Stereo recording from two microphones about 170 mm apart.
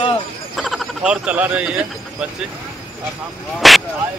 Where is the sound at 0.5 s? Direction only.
Centre (ahead or behind).